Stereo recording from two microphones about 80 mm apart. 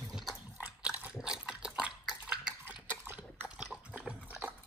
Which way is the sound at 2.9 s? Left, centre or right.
Right.